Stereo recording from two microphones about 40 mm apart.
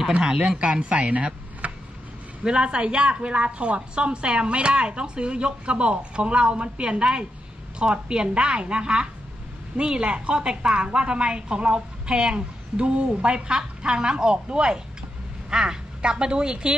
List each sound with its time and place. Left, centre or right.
0.4 s speech: right
2.4 s a woman's voice: right